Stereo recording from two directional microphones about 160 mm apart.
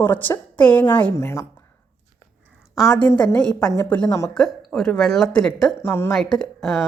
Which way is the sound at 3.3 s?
5° left (ahead or behind).